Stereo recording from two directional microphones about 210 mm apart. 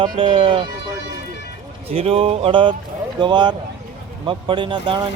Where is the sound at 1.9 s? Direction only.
30° right (ahead or behind).